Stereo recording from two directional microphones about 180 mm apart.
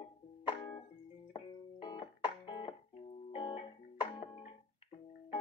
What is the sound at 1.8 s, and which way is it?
Music, 25° left (ahead or behind).